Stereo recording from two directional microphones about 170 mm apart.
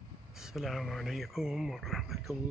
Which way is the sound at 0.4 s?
Centre (ahead or behind).